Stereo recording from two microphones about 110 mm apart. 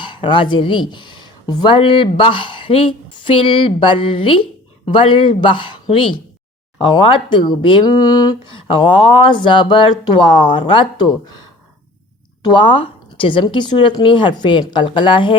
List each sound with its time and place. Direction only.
0.0 s speech: 45° left (ahead or behind)
8.5 s speech: 50° left (ahead or behind)
12.5 s speech: 45° left (ahead or behind)